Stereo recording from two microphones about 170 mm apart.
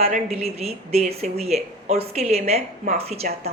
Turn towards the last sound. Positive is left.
turn(degrees=-40)  # may be behind; listen again after turning